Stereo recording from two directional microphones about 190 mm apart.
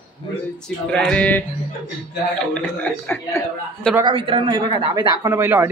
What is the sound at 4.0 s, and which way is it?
Speech, 25° right (ahead or behind).